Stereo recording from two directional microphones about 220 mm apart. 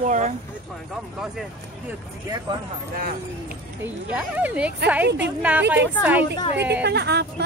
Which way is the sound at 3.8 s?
5° right (ahead or behind).